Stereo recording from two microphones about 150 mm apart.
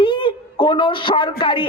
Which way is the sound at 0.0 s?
35° left (ahead or behind).